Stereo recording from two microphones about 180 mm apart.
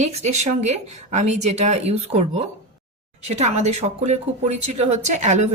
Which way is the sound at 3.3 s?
40° right (ahead or behind).